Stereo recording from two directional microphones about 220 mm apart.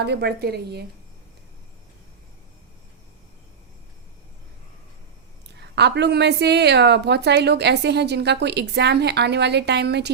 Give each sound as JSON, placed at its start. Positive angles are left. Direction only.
{"t": 0.0, "sound": "a woman's voice", "side_deg": -50}
{"t": 5.5, "sound": "a woman's voice", "side_deg": -50}